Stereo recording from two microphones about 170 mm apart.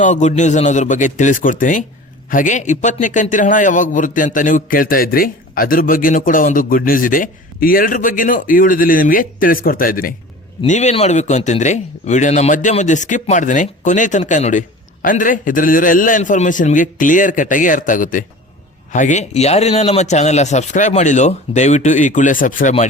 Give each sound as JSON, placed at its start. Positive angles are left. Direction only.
{"t": 0.0, "sound": "a man's voice", "side_deg": 45}
{"t": 10.7, "sound": "a man's voice", "side_deg": 40}